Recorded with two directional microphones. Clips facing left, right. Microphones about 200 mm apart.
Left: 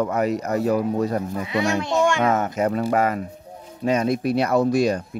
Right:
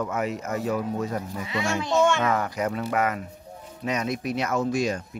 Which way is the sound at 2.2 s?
25° left (ahead or behind).